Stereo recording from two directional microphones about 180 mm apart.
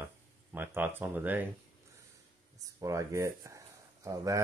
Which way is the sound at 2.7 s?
15° right (ahead or behind).